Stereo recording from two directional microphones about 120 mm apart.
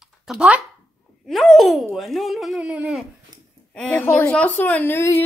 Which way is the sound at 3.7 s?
10° left (ahead or behind).